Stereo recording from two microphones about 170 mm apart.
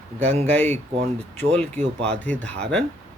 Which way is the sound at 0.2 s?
40° right (ahead or behind).